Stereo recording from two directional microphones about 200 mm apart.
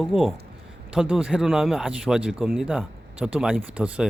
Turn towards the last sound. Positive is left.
turn(degrees=-5)  # may be behind; listen again after turning